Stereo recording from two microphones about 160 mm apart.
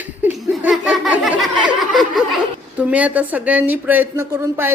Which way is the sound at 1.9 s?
Centre (ahead or behind).